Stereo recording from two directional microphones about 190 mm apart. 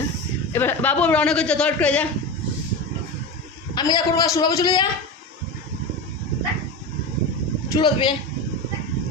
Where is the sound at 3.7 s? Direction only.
25° left (ahead or behind).